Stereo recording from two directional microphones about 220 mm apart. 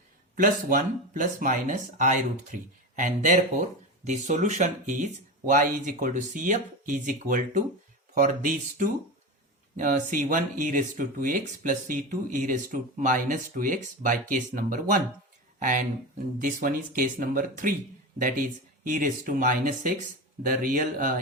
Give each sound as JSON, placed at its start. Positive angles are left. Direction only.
{"t": 0.3, "sound": "speech", "side_deg": -40}